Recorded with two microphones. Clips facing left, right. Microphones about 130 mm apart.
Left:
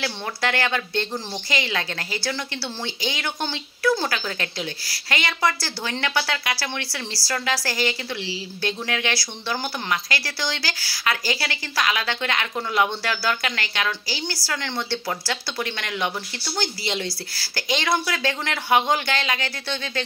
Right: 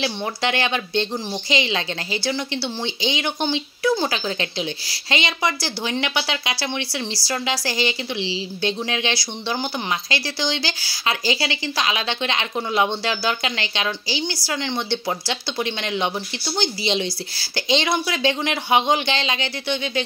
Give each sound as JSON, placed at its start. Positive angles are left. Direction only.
{"t": 0.0, "sound": "a woman's voice", "side_deg": -20}